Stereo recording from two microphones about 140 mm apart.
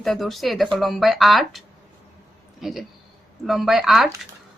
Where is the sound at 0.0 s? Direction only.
Centre (ahead or behind).